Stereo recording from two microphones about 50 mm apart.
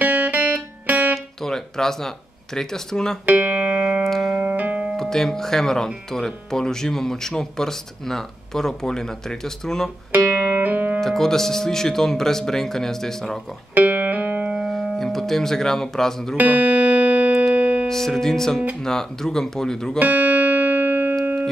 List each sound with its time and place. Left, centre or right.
0.0 s music: right
1.1 s speech: centre
3.3 s speech: right
3.7 s music: right
4.0 s music: centre
4.4 s music: right
4.9 s speech: centre
10.5 s music: right
11.0 s speech: centre
13.7 s music: right
15.0 s speech: centre
16.3 s music: right
17.8 s speech: centre
20.0 s music: right